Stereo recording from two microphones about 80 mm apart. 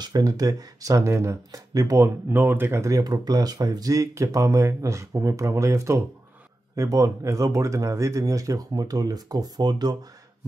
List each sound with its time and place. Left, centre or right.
0.0 s speech: right
2.2 s speech: right
3.0 s speech: right